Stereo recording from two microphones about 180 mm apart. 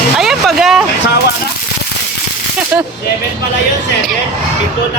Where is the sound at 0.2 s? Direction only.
Centre (ahead or behind).